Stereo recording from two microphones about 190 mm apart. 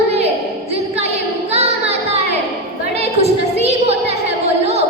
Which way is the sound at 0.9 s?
35° right (ahead or behind).